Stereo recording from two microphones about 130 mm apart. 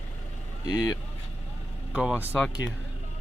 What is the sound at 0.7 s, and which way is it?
Speech, 30° left (ahead or behind).